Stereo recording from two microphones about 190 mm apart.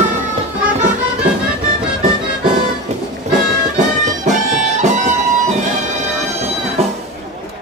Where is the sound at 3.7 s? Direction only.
40° right (ahead or behind).